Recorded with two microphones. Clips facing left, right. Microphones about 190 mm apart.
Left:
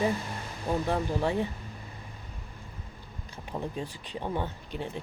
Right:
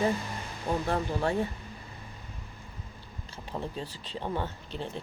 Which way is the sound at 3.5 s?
15° left (ahead or behind).